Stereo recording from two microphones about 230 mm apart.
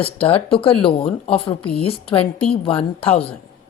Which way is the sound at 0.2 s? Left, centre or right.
Left.